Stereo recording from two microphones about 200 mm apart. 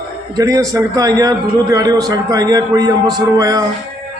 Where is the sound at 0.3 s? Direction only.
15° right (ahead or behind).